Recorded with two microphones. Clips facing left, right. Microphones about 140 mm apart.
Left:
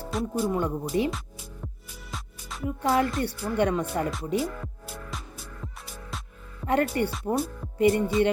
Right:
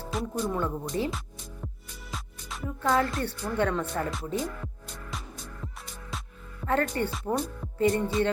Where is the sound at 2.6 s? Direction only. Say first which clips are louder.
Left 2 dB; 15° left (ahead or behind).